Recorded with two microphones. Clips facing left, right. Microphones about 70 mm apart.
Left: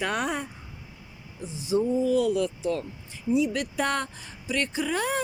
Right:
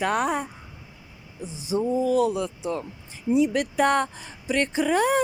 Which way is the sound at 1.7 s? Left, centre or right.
Centre.